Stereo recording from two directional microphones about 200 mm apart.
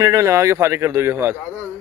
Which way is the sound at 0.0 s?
15° right (ahead or behind).